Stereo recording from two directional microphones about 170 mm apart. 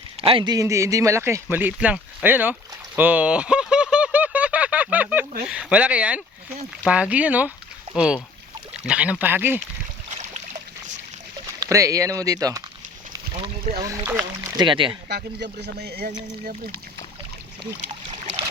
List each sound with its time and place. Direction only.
0.2 s speech: 30° right (ahead or behind); by 9.6 s 10° right (ahead or behind)
10.1 s boat: 40° right (ahead or behind)
11.6 s speech: 20° right (ahead or behind)
13.3 s boat: 30° right (ahead or behind)
13.8 s speech: 20° right (ahead or behind)
15.1 s speech: 75° right (ahead or behind)